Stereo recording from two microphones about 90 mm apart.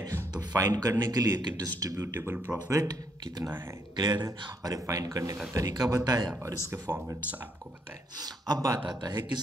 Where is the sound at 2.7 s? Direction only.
40° right (ahead or behind).